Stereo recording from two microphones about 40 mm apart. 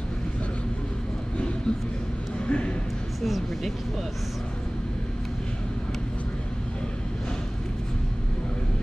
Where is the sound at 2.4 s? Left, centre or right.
Left.